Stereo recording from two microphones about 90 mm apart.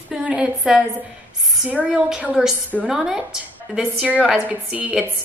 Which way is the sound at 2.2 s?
10° right (ahead or behind).